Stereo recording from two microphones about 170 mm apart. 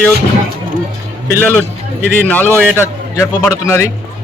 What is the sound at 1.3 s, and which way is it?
A man's voice, 15° left (ahead or behind).